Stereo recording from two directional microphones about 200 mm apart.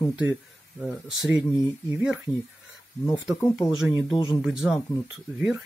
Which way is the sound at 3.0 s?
20° left (ahead or behind).